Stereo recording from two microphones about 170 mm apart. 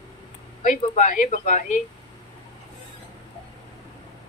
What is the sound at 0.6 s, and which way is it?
A woman's voice, 50° left (ahead or behind).